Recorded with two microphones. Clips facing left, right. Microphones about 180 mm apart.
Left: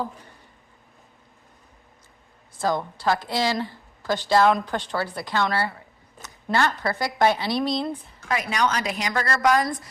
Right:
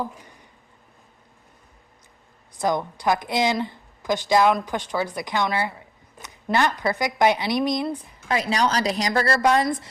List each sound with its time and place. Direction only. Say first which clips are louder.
0.0 s a woman's voice: even; 15° right (ahead or behind)
2.6 s a woman's voice: right 1 dB; 20° right (ahead or behind)
8.3 s a woman's voice: right 2 dB; 30° right (ahead or behind)